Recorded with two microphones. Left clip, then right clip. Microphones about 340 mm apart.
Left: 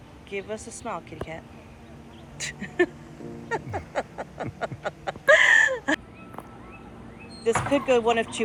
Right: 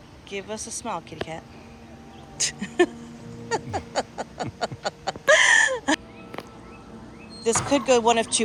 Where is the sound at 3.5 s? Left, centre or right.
Centre.